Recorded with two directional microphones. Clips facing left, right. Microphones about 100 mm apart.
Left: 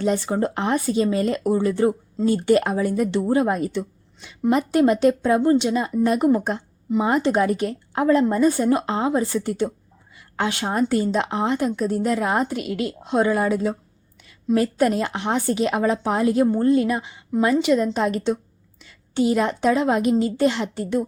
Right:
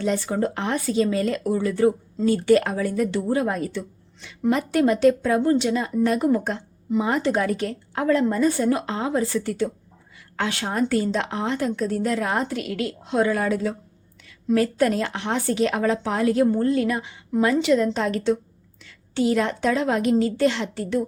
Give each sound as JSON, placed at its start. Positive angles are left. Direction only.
{"t": 0.0, "sound": "a woman's voice", "side_deg": 30}